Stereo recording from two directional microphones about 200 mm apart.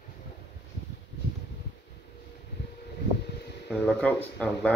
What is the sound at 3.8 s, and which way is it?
Speech, 5° left (ahead or behind).